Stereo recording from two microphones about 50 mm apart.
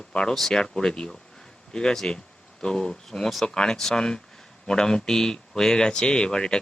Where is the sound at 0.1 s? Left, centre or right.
Centre.